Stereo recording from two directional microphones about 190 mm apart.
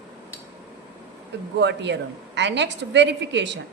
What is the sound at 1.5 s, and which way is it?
A woman's voice, 65° right (ahead or behind).